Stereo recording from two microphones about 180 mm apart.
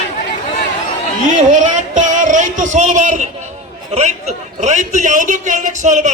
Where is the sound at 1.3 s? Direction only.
45° right (ahead or behind).